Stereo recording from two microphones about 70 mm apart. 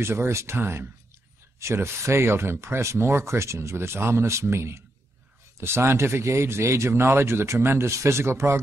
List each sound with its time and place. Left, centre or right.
0.0 s speech: right